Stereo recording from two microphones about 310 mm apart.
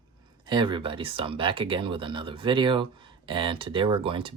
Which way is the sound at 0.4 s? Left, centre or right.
Centre.